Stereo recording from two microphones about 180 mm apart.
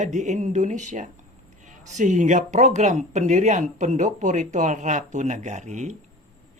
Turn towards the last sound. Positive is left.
turn(degrees=-40)  # may be behind; listen again after turning